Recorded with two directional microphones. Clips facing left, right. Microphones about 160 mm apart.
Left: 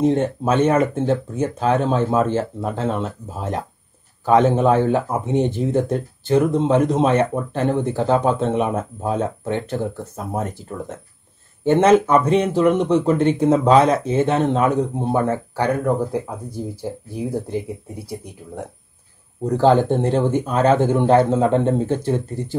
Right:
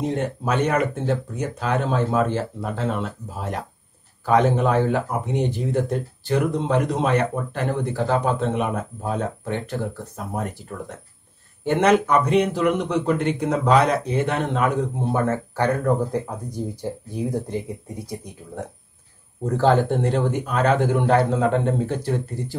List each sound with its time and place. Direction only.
0.1 s a man's voice: 25° left (ahead or behind)
11.6 s speech: 25° left (ahead or behind)
13.1 s speech: 40° left (ahead or behind)
13.4 s speech: 25° left (ahead or behind)
14.8 s speech: 20° left (ahead or behind)
17.3 s speech: 10° left (ahead or behind)
19.4 s speech: 15° left (ahead or behind)